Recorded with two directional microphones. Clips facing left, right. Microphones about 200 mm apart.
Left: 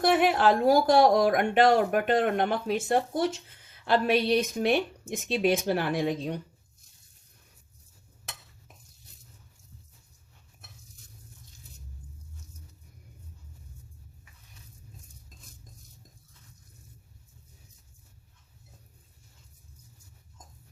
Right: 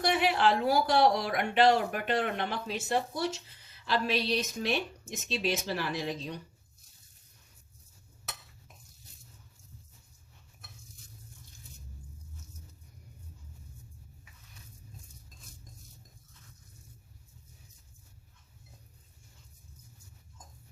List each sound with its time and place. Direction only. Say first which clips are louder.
0.0 s speech: left 5 dB; 50° left (ahead or behind)